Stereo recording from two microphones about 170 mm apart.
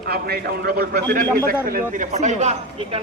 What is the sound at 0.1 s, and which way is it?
Speech, 65° right (ahead or behind).